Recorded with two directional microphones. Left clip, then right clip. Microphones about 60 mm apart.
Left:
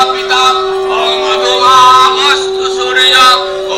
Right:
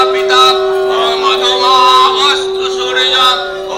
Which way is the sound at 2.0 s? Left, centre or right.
Right.